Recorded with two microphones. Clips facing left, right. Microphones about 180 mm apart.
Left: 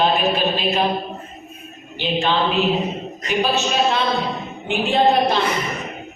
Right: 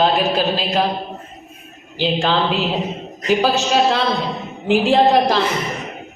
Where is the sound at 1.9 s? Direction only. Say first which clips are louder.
Right 2 dB; 90° right.